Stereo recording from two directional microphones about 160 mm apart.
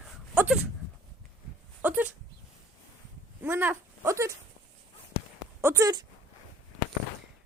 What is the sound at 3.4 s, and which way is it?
Speech, 15° right (ahead or behind).